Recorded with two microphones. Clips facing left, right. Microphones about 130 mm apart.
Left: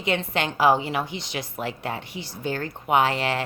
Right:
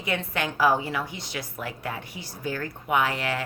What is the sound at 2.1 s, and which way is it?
Speech, 90° left.